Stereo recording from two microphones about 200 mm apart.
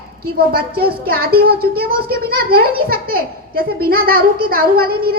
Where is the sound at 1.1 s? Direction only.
50° right (ahead or behind).